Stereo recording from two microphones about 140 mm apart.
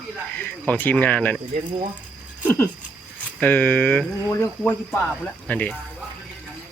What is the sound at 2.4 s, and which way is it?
Speech, 10° left (ahead or behind).